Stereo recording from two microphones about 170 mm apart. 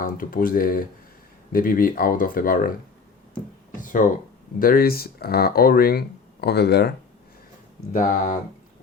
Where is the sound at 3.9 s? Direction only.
50° left (ahead or behind); by 6.9 s 70° left (ahead or behind).